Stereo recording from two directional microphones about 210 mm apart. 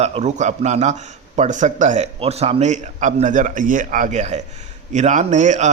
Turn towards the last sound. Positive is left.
turn(degrees=-35)  # may be behind; listen again after turning